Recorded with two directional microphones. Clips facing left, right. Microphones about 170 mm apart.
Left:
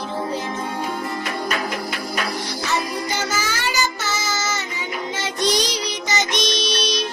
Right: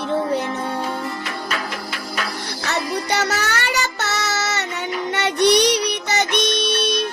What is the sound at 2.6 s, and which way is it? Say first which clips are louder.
Music: right 2 dB; 70° right (ahead or behind).